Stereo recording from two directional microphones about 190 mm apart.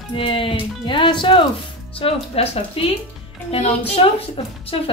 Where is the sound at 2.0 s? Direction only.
30° left (ahead or behind).